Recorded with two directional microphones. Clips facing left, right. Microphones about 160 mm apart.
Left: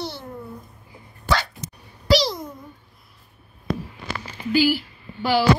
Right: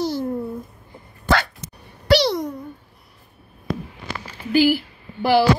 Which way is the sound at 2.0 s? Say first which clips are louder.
Right 3 dB; 65° right (ahead or behind).